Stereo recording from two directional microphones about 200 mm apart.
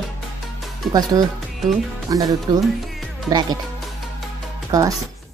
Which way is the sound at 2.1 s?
20° right (ahead or behind).